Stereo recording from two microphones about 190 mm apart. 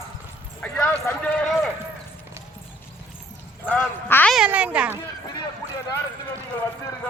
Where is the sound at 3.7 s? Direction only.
10° left (ahead or behind).